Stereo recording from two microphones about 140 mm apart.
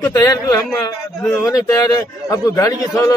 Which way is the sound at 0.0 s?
25° left (ahead or behind).